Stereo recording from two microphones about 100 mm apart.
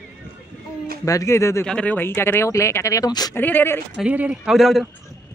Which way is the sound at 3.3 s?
20° left (ahead or behind).